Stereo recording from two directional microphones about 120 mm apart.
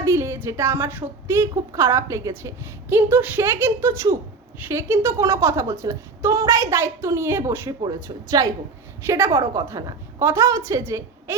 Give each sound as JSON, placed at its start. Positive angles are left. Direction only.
{"t": 0.0, "sound": "a woman's voice", "side_deg": -25}